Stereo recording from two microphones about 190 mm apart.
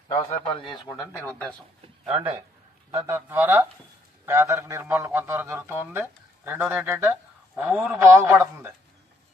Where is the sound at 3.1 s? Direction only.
10° right (ahead or behind).